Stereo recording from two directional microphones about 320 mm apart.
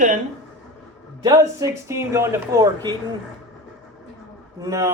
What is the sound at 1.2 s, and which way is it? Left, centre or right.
Speech, centre.